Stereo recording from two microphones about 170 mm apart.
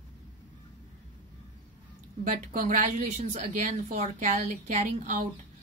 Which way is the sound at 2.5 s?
50° right (ahead or behind).